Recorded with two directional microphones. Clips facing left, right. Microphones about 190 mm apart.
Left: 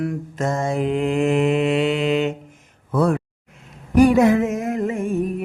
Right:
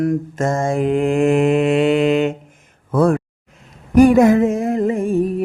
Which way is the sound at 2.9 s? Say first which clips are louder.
Right 4 dB; 50° right (ahead or behind).